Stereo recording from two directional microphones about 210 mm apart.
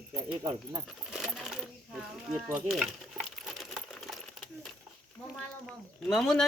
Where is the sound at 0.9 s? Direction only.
Centre (ahead or behind).